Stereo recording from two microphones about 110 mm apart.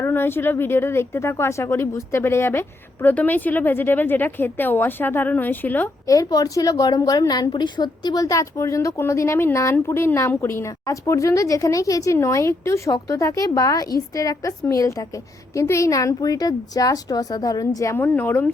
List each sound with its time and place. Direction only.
0.0 s a woman's voice: 20° left (ahead or behind)
6.1 s a woman's voice: 30° left (ahead or behind)
17.9 s speech: 15° left (ahead or behind)